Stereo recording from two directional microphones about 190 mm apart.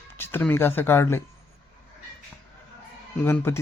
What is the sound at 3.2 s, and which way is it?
Speech, 10° left (ahead or behind).